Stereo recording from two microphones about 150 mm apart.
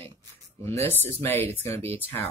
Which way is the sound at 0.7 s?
15° left (ahead or behind).